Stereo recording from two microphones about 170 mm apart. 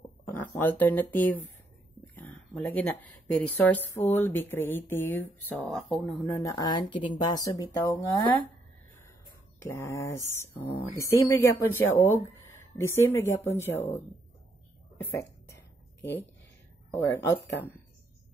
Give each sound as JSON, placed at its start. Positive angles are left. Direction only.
{"t": 0.3, "sound": "speech", "side_deg": 10}
{"t": 2.5, "sound": "speech", "side_deg": 5}
{"t": 6.4, "sound": "speech", "side_deg": 25}
{"t": 9.6, "sound": "speech", "side_deg": 15}
{"t": 15.0, "sound": "a sound", "side_deg": 15}
{"t": 16.9, "sound": "speech", "side_deg": 15}